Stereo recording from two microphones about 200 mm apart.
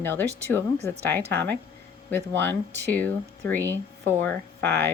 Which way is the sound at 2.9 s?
10° left (ahead or behind).